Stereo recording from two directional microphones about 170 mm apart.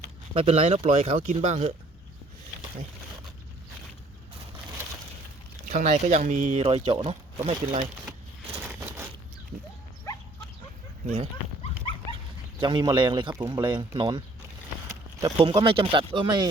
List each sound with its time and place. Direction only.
0.3 s speech: 35° right (ahead or behind)
5.6 s speech: 50° right (ahead or behind)
6.6 s speech: 35° right (ahead or behind)
8.6 s a sound: 10° right (ahead or behind)
10.1 s dog: 20° left (ahead or behind)
11.0 s speech: 40° right (ahead or behind)
11.9 s dog: 35° left (ahead or behind)
12.5 s speech: 25° right (ahead or behind)
14.8 s a sound: 15° right (ahead or behind)
15.4 s speech: 30° right (ahead or behind)